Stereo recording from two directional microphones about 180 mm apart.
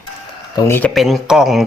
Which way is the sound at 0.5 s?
15° left (ahead or behind).